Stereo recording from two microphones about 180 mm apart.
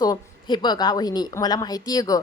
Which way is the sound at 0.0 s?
25° left (ahead or behind).